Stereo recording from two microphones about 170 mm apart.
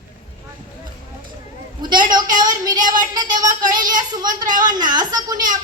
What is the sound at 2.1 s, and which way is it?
A woman's voice, 25° right (ahead or behind).